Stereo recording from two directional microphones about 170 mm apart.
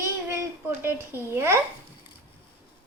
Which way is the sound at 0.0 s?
15° right (ahead or behind).